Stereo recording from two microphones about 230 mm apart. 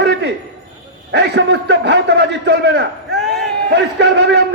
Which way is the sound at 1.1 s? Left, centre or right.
Right.